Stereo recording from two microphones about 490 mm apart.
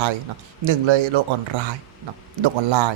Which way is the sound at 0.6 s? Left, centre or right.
Right.